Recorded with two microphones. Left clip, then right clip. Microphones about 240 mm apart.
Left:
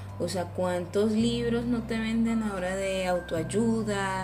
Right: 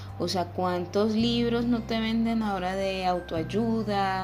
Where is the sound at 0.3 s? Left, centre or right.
Centre.